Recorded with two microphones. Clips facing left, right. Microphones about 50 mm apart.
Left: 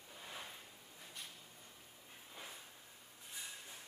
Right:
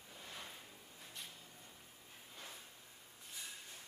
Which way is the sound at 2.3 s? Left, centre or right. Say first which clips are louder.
Left 1 dB; centre.